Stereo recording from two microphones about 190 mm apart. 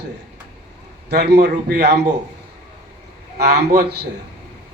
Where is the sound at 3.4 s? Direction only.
60° right (ahead or behind).